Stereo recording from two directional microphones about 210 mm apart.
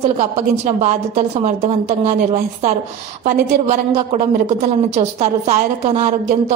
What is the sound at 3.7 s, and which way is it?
A woman's voice, 30° right (ahead or behind).